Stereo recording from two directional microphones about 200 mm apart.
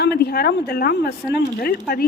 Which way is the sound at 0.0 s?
50° left (ahead or behind).